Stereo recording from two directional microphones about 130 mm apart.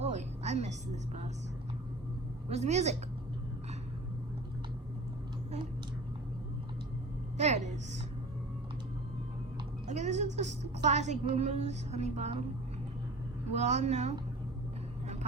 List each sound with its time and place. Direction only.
0.0 s a sound: 60° right (ahead or behind)
2.5 s a woman's voice: 60° right (ahead or behind)
7.3 s a sound: 60° right (ahead or behind)
9.8 s music: 65° right (ahead or behind)
10.8 s a woman's voice: 65° right (ahead or behind)
13.5 s a woman's voice: 60° right (ahead or behind)